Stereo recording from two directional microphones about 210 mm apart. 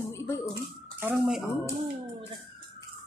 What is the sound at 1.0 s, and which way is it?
Speech, 10° right (ahead or behind).